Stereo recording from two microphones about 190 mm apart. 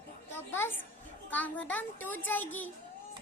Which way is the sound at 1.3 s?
10° left (ahead or behind).